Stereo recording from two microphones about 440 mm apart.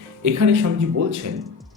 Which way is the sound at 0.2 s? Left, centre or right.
Right.